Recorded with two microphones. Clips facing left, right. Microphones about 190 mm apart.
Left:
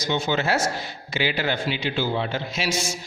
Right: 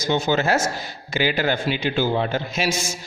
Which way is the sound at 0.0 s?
45° right (ahead or behind).